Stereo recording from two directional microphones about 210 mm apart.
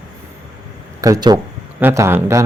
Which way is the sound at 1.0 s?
20° right (ahead or behind).